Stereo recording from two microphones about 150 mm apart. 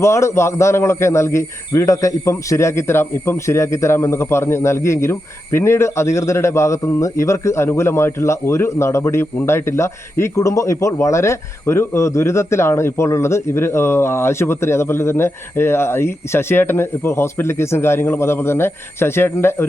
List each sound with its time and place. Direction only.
0.0 s a man's voice: 20° left (ahead or behind)